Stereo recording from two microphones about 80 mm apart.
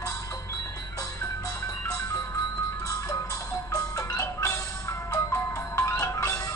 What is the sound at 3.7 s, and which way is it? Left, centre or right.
Music, left.